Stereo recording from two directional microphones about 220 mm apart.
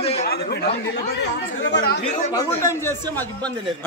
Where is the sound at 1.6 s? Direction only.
55° left (ahead or behind).